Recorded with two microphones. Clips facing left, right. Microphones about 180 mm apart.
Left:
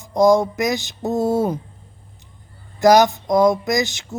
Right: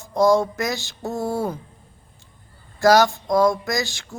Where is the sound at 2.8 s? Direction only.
20° left (ahead or behind).